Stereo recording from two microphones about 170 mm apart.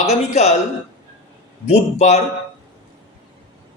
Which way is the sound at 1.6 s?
40° left (ahead or behind).